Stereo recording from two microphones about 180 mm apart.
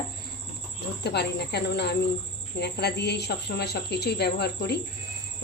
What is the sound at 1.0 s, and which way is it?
A woman's voice, 65° left (ahead or behind).